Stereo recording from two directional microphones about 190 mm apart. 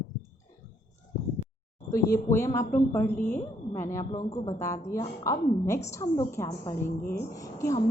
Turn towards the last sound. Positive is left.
turn(degrees=15)  # may be behind; listen again after turning